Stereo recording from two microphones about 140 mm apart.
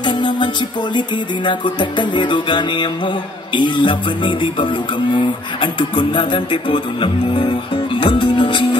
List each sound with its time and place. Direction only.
0.0 s music: 30° left (ahead or behind)